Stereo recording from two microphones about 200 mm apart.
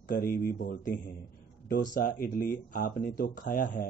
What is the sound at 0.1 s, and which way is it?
Speech, 45° left (ahead or behind).